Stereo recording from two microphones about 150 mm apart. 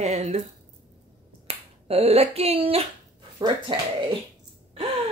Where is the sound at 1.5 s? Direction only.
40° right (ahead or behind).